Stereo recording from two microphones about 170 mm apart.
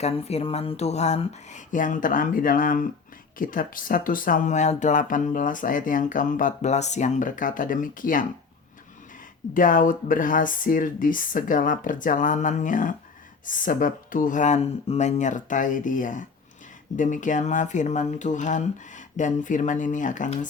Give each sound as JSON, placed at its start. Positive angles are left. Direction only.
{"t": 0.0, "sound": "speech", "side_deg": 35}
{"t": 9.6, "sound": "speech", "side_deg": 50}